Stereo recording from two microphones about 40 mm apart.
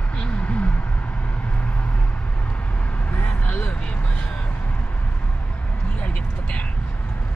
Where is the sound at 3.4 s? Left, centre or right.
Left.